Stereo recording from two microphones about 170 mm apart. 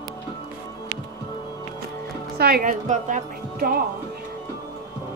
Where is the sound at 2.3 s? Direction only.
60° right (ahead or behind).